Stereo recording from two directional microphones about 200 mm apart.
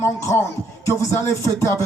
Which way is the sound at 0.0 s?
15° left (ahead or behind).